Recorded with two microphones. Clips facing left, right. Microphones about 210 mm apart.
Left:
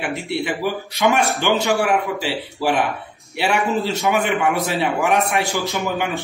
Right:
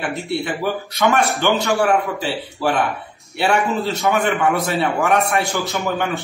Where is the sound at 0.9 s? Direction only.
15° left (ahead or behind).